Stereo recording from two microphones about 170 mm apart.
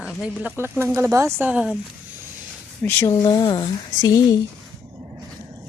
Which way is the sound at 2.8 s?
15° left (ahead or behind).